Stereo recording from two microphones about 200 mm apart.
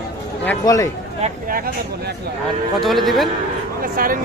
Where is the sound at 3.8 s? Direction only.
45° right (ahead or behind).